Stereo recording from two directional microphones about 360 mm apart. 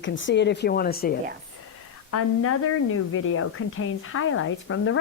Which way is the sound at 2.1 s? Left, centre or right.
Left.